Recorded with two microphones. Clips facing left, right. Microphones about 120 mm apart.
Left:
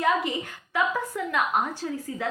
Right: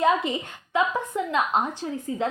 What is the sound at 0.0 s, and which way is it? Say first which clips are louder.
A woman's voice: right 2 dB; 25° right (ahead or behind).